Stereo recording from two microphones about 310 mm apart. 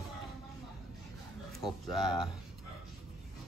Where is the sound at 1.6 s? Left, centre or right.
Centre.